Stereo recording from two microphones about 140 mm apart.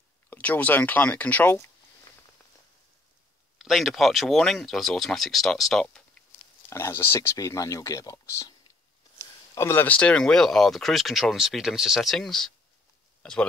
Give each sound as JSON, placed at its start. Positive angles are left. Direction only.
{"t": 0.3, "sound": "speech", "side_deg": 10}
{"t": 3.5, "sound": "speech", "side_deg": 0}
{"t": 6.7, "sound": "speech", "side_deg": 20}
{"t": 9.6, "sound": "speech", "side_deg": 15}